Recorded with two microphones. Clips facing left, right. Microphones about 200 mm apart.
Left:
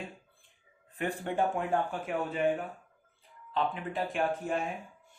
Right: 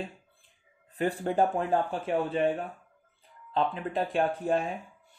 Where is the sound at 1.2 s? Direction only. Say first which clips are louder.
Right 3 dB; 35° right (ahead or behind).